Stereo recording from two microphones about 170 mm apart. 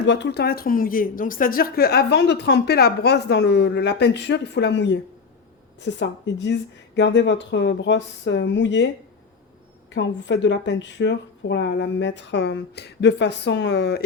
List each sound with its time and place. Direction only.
0.0 s a woman's voice: 90° left
9.9 s a woman's voice: 90° left